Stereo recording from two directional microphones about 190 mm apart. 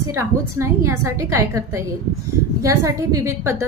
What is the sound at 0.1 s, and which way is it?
A woman's voice, 15° right (ahead or behind).